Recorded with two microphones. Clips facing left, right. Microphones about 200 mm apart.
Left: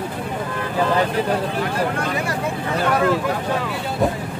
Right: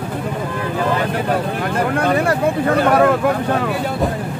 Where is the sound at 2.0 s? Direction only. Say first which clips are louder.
Right 7 dB; 55° right (ahead or behind).